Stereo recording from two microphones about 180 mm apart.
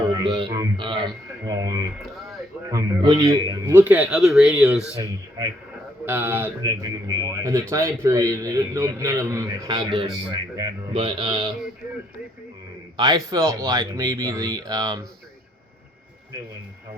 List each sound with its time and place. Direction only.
0.1 s speech: 25° right (ahead or behind)
2.0 s speech: centre (ahead or behind)
2.6 s a man's voice: 20° right (ahead or behind); by 4.8 s 5° right (ahead or behind)
6.1 s a man's voice: 10° right (ahead or behind)
13.0 s speech: 20° right (ahead or behind)